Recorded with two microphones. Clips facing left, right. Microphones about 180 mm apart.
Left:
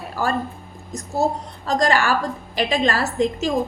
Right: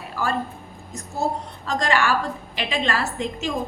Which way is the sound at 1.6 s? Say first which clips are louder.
Left 3 dB; 40° left (ahead or behind).